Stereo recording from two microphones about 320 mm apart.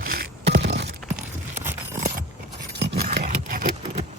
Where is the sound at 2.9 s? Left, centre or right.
Right.